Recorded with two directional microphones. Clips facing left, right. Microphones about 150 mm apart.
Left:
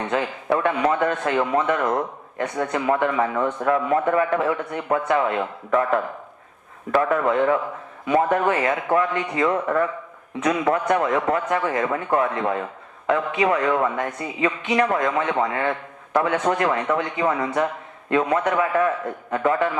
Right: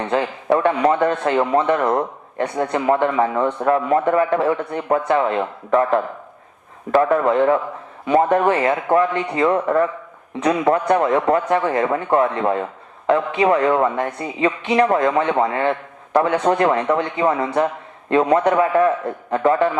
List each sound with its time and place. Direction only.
0.1 s a man's voice: 35° right (ahead or behind)